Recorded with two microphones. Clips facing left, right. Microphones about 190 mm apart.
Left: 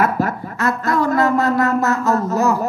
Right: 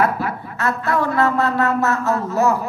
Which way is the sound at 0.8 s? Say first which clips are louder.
Left 2 dB; 40° left (ahead or behind).